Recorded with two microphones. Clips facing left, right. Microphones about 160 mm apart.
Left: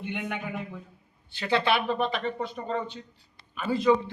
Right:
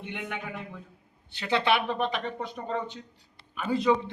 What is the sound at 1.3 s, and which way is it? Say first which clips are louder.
A man's voice: even; 20° right (ahead or behind).